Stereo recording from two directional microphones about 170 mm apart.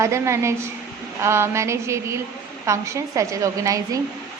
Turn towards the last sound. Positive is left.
turn(degrees=-20)  # may be behind; listen again after turning